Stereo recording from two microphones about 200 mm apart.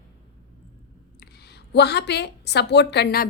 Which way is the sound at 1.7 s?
55° left (ahead or behind).